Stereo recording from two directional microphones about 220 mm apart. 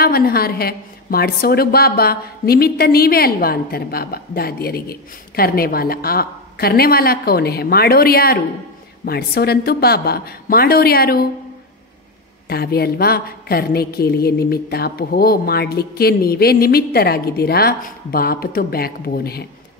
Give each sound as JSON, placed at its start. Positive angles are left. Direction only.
{"t": 0.0, "sound": "a woman's voice", "side_deg": 45}
{"t": 12.4, "sound": "a woman's voice", "side_deg": 45}